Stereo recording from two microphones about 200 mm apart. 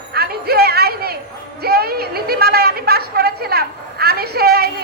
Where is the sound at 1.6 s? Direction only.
50° right (ahead or behind).